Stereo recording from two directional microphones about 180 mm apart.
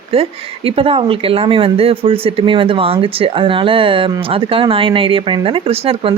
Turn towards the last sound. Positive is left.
turn(degrees=-30)  # may be behind; listen again after turning